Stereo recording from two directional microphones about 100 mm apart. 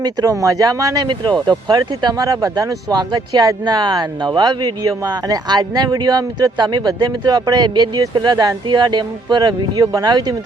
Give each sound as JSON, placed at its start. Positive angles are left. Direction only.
{"t": 0.0, "sound": "a man's voice", "side_deg": -35}
{"t": 1.5, "sound": "a man's voice", "side_deg": -45}